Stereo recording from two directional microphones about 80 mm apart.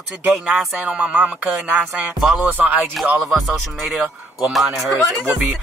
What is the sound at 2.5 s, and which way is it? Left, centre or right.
Speech, right.